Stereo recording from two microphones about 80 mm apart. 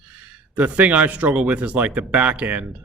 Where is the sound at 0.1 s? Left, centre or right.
Centre.